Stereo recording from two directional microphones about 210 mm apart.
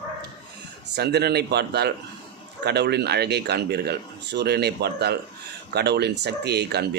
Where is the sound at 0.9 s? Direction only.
50° right (ahead or behind).